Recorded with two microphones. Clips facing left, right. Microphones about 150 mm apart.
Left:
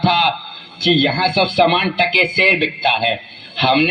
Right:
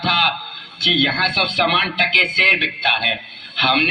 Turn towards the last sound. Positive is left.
turn(degrees=50)  # may be behind; listen again after turning